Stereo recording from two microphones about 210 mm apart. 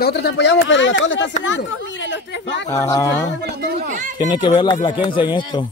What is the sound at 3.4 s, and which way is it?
Speech, 45° right (ahead or behind).